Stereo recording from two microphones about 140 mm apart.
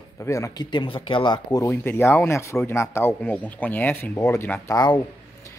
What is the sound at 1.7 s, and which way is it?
A man's voice, 15° left (ahead or behind).